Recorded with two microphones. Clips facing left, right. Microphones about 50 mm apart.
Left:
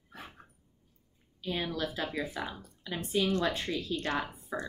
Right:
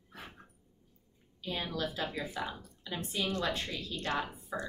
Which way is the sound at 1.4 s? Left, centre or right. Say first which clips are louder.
Left 2 dB; left.